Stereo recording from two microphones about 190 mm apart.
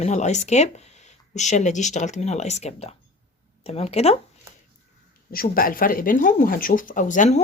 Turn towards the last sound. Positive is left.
turn(degrees=40)  # may be behind; listen again after turning